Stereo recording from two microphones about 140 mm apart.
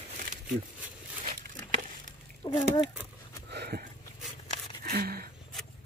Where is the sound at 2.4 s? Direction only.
35° left (ahead or behind).